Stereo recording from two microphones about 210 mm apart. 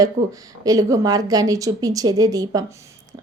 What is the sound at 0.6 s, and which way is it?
A woman's voice, 15° right (ahead or behind).